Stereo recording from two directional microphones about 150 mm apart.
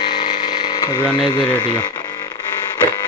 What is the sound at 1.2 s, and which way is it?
Speech, 35° left (ahead or behind).